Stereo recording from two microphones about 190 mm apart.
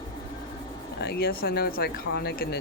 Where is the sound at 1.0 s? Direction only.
55° left (ahead or behind).